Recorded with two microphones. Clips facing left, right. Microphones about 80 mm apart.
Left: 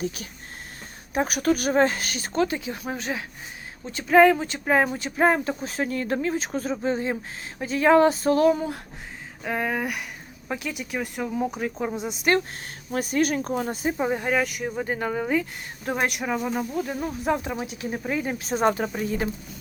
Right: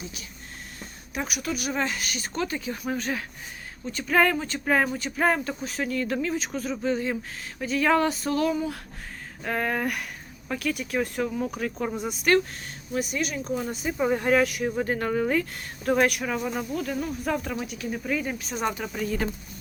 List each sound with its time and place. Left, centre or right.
0.0 s speech: left
9.4 s speech: centre; by 12.4 s left
12.9 s speech: left
14.1 s speech: centre; by 19.1 s left